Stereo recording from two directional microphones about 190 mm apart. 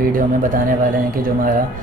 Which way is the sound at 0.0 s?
45° right (ahead or behind).